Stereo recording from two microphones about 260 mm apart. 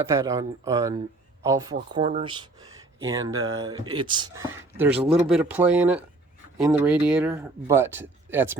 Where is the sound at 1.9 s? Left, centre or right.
Right.